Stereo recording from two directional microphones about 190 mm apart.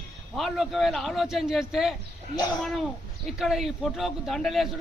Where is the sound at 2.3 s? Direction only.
20° left (ahead or behind).